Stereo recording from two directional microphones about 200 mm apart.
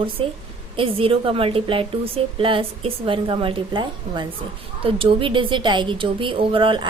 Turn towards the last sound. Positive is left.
turn(degrees=-25)  # may be behind; listen again after turning